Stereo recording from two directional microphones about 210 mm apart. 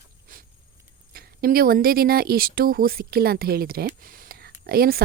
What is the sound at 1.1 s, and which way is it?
Speech, 45° right (ahead or behind).